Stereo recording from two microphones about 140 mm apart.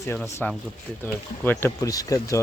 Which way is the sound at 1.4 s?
15° left (ahead or behind).